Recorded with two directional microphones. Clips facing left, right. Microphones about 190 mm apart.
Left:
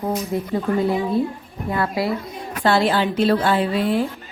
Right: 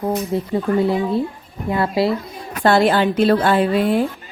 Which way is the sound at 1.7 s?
25° right (ahead or behind).